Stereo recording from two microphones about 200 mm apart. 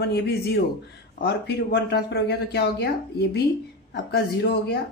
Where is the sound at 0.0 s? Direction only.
55° left (ahead or behind).